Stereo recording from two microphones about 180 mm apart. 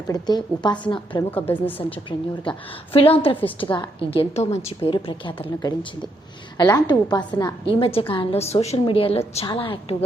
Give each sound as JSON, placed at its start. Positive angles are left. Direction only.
{"t": 0.1, "sound": "a woman's voice", "side_deg": 25}
{"t": 1.3, "sound": "a woman's voice", "side_deg": 10}
{"t": 2.0, "sound": "a woman's voice", "side_deg": 25}